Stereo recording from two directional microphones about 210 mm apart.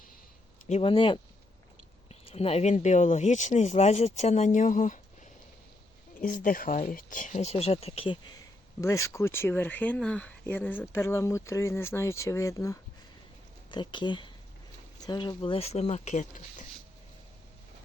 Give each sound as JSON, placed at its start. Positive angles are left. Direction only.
{"t": 0.7, "sound": "speech", "side_deg": 25}
{"t": 6.1, "sound": "speech", "side_deg": 40}